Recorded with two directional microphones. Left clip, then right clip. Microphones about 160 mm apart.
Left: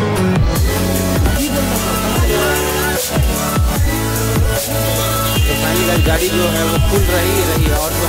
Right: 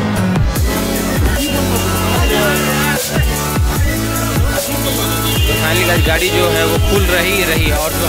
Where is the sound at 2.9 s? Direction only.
Centre (ahead or behind).